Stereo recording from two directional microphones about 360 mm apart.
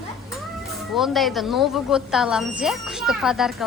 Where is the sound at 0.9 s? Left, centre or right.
Centre.